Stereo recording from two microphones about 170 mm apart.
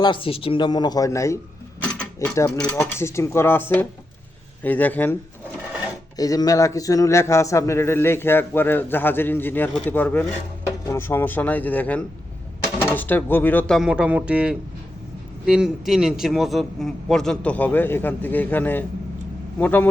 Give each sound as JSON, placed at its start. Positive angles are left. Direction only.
{"t": 0.0, "sound": "a man's voice", "side_deg": 30}
{"t": 6.1, "sound": "a man's voice", "side_deg": 20}